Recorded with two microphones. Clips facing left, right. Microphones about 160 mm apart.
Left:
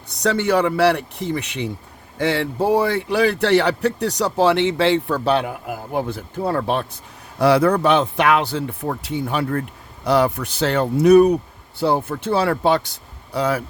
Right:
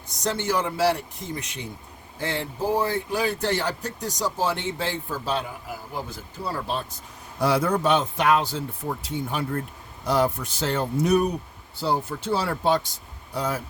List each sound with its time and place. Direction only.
0.1 s speech: 65° left (ahead or behind)